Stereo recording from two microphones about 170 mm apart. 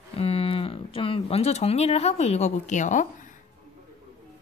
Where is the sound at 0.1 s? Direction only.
35° left (ahead or behind).